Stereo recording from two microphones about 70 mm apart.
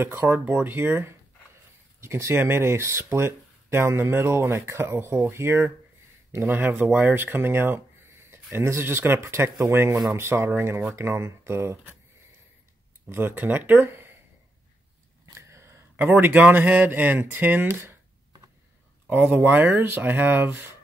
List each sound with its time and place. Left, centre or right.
0.0 s speech: right
2.0 s speech: right
6.3 s speech: right
13.1 s speech: right
15.3 s a sound: right
16.0 s speech: right
19.0 s speech: right